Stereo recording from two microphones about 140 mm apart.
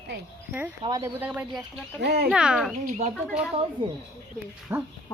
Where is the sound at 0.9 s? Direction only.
25° right (ahead or behind).